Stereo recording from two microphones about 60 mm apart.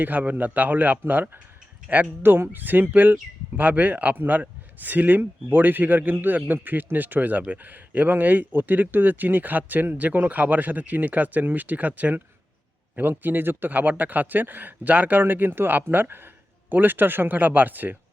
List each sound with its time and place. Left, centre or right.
0.0 s speech: right